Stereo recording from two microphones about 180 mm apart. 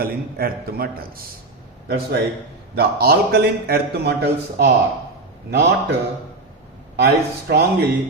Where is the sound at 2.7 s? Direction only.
60° right (ahead or behind).